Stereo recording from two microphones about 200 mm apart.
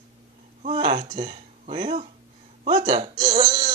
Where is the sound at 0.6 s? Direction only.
30° right (ahead or behind).